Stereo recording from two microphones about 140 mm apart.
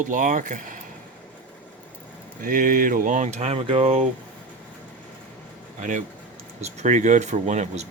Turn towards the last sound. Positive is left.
turn(degrees=-55)  # may be behind; listen again after turning